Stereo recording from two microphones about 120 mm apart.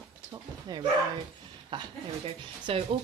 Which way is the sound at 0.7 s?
30° right (ahead or behind).